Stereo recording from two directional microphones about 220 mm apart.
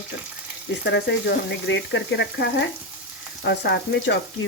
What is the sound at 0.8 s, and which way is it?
Speech, 50° left (ahead or behind).